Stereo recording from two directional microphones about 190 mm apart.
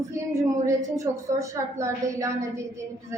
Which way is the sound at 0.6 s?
15° right (ahead or behind).